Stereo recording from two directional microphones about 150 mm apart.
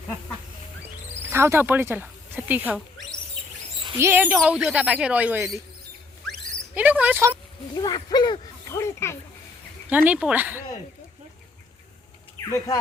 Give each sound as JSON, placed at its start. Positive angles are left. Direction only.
{"t": 1.3, "sound": "speech", "side_deg": -15}
{"t": 3.9, "sound": "speech", "side_deg": -15}
{"t": 6.7, "sound": "speech", "side_deg": -10}
{"t": 7.7, "sound": "speech", "side_deg": 25}
{"t": 9.9, "sound": "speech", "side_deg": -10}
{"t": 12.5, "sound": "speech", "side_deg": 20}